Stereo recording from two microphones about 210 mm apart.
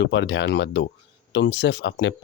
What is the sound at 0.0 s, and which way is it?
Speech, 55° left (ahead or behind).